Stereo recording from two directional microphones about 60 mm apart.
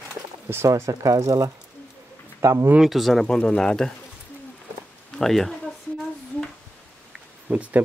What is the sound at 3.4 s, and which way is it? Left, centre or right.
Speech, centre.